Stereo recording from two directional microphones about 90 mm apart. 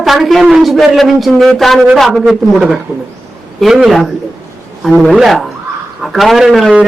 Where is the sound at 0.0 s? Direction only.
Centre (ahead or behind).